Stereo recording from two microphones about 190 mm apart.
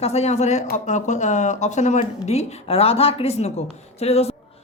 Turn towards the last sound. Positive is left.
turn(degrees=35)  # may be behind; listen again after turning